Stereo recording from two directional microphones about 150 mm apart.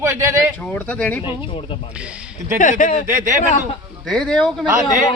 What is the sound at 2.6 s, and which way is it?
Speech, 55° left (ahead or behind).